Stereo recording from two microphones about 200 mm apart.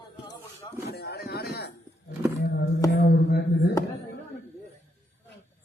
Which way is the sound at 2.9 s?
55° left (ahead or behind).